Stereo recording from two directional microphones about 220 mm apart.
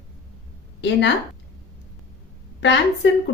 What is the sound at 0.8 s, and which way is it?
Speech, 50° left (ahead or behind).